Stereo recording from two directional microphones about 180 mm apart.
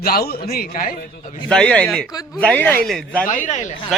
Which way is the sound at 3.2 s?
45° left (ahead or behind).